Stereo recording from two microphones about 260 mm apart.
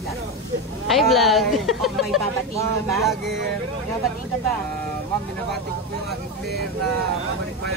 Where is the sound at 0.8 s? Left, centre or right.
Centre.